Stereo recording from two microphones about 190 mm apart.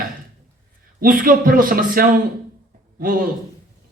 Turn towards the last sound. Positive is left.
turn(degrees=-45)  # may be behind; listen again after turning